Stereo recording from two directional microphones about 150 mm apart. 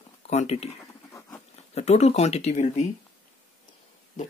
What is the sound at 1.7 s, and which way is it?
Speech, 45° left (ahead or behind).